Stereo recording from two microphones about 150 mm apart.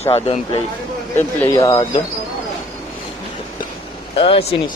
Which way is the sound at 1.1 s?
15° left (ahead or behind).